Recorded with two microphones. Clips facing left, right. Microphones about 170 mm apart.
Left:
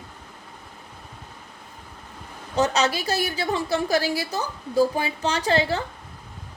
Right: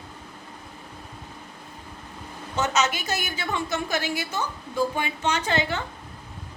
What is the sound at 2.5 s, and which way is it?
A woman's voice, 35° left (ahead or behind).